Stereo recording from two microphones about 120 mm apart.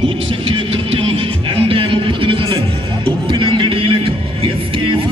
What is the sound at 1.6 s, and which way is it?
Music, 45° right (ahead or behind).